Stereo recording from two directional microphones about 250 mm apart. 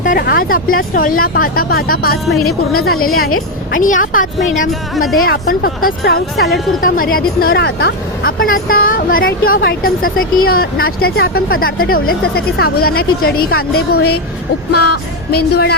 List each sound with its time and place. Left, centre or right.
0.0 s speech: left
3.2 s a woman's voice: left
3.7 s speech: left
4.9 s speech: centre
5.2 s speech: left
9.5 s a woman's voice: left
9.8 s speech: left
13.9 s a woman's voice: left
14.7 s music: left